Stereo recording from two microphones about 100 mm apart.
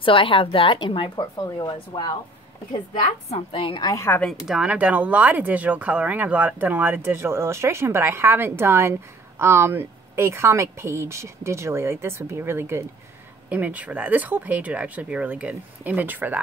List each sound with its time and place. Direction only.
0.0 s a woman's voice: 60° left (ahead or behind)
1.4 s speech: 40° left (ahead or behind)
3.3 s a woman's voice: 70° left (ahead or behind)
3.9 s a woman's voice: 25° left (ahead or behind)
4.5 s speech: 10° right (ahead or behind)
13.5 s speech: 15° right (ahead or behind)